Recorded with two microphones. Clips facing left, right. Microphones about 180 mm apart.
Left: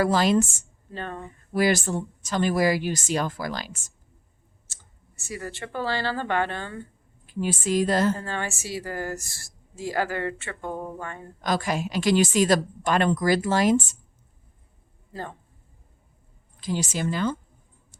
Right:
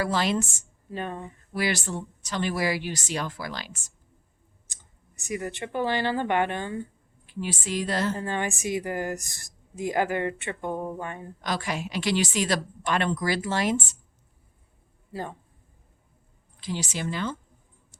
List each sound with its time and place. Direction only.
0.0 s speech: 45° left (ahead or behind)
0.9 s a woman's voice: 15° right (ahead or behind)
1.5 s speech: 45° left (ahead or behind)
4.7 s speech: 15° right (ahead or behind)
7.3 s speech: 45° left (ahead or behind)
8.1 s a woman's voice: 15° right (ahead or behind)
11.4 s speech: 45° left (ahead or behind)
16.6 s speech: 45° left (ahead or behind)